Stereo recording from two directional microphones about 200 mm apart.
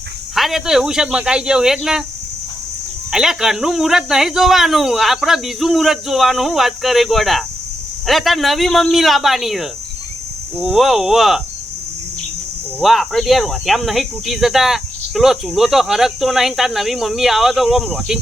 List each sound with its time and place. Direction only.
0.3 s speech: centre (ahead or behind)
3.1 s speech: 5° right (ahead or behind)
12.8 s speech: centre (ahead or behind)